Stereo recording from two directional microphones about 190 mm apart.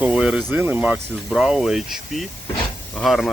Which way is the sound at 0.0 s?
5° right (ahead or behind).